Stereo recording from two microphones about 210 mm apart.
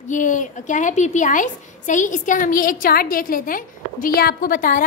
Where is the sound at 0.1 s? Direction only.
35° left (ahead or behind).